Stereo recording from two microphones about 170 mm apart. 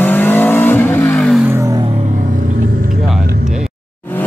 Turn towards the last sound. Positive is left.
turn(degrees=10)  # may be behind; listen again after turning